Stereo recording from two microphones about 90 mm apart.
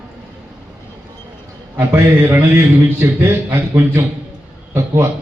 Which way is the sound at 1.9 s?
25° right (ahead or behind).